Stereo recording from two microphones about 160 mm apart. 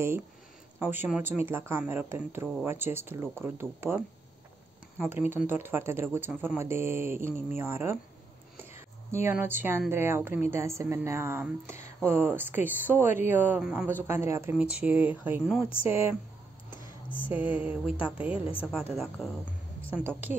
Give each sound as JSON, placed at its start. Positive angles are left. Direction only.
{"t": 0.7, "sound": "speech", "side_deg": -10}
{"t": 16.7, "sound": "a sound", "side_deg": 30}
{"t": 17.3, "sound": "speech", "side_deg": -10}
{"t": 18.6, "sound": "a woman's voice", "side_deg": 5}
{"t": 19.9, "sound": "speech", "side_deg": -10}